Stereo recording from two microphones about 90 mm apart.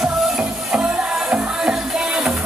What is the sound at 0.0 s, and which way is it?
Music, 10° right (ahead or behind).